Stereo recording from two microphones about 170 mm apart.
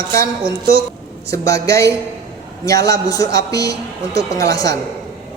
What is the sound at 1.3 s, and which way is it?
A woman's voice, 20° left (ahead or behind).